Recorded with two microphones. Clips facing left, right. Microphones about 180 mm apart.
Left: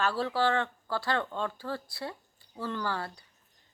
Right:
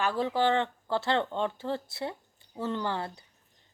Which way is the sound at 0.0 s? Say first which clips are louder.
Right 1 dB; 15° right (ahead or behind).